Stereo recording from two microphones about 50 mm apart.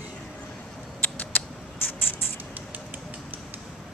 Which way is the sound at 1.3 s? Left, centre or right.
Left.